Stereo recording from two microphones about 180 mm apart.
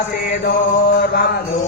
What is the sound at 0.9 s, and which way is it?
Music, 60° left (ahead or behind).